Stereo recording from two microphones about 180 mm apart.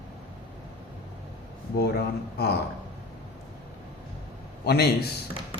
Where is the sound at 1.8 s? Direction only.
60° left (ahead or behind).